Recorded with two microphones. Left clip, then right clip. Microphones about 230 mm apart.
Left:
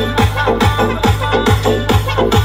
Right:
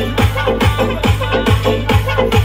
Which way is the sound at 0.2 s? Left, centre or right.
Left.